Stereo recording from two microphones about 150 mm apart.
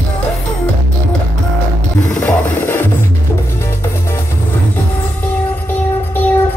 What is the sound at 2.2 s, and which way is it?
Music, 10° left (ahead or behind).